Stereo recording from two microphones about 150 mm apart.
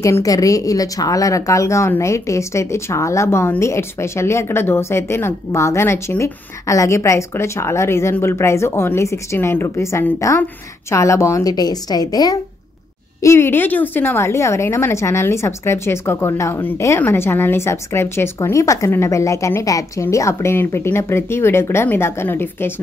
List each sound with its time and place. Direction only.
0.0 s a woman's voice: 20° left (ahead or behind)